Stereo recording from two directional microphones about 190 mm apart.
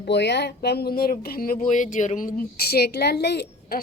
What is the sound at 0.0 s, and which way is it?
Speech, 65° left (ahead or behind).